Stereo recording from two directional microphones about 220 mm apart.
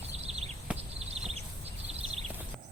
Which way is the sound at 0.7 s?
5° right (ahead or behind).